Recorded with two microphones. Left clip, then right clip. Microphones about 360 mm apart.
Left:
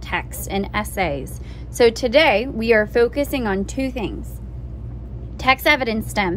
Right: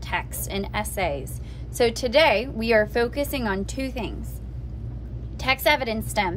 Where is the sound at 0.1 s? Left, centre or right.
Centre.